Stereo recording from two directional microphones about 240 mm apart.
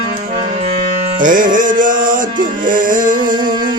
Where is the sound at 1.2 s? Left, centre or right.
Right.